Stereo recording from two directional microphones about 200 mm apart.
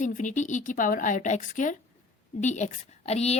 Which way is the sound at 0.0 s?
40° left (ahead or behind).